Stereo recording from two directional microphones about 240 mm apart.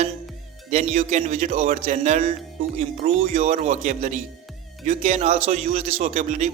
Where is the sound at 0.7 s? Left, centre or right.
Right.